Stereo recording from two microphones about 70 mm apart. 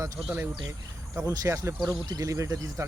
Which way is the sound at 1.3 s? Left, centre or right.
Right.